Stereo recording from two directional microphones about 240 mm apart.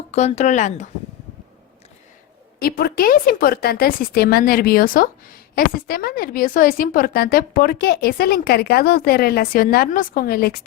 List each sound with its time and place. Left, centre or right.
0.1 s speech: left
2.6 s a woman's voice: left